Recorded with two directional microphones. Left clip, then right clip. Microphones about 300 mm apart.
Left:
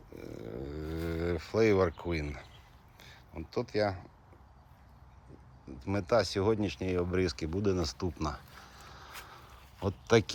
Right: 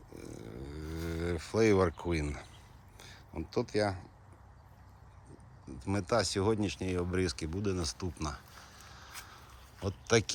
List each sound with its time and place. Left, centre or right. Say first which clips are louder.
0.1 s a sound: left 4 dB; centre
3.0 s speech: right 3 dB; centre
5.6 s speech: left 2 dB; centre